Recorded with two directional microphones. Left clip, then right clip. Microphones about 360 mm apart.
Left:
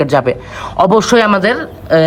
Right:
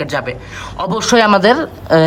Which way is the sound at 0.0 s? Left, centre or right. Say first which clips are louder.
Left 8 dB; centre.